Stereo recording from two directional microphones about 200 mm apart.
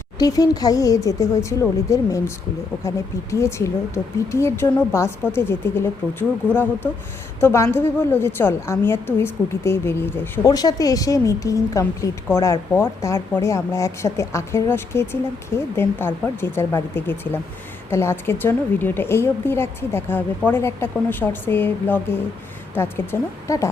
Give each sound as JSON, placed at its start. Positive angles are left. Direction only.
{"t": 0.2, "sound": "a woman's voice", "side_deg": 20}